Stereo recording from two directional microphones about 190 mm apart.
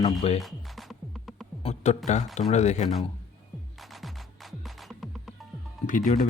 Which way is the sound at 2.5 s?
35° left (ahead or behind).